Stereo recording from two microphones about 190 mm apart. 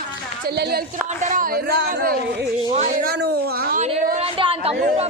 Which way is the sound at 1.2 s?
45° right (ahead or behind).